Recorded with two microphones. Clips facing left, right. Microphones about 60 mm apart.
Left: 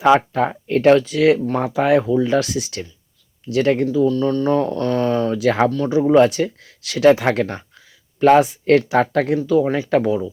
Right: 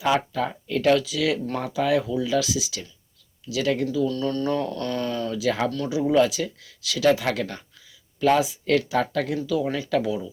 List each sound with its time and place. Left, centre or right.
0.0 s speech: left
4.1 s speech: centre
4.5 s speech: left
5.4 s speech: left
5.9 s speech: left
7.3 s speech: left
8.2 s speech: left